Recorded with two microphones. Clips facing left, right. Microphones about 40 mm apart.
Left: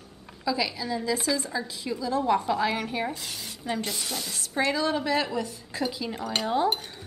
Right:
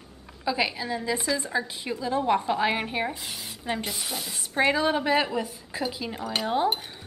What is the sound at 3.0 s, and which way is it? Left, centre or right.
Speech, centre.